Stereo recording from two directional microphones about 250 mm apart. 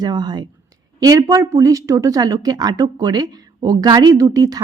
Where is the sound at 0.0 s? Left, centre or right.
Centre.